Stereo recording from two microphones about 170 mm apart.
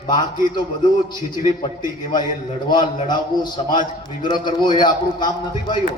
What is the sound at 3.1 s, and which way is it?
A man's voice, 25° left (ahead or behind).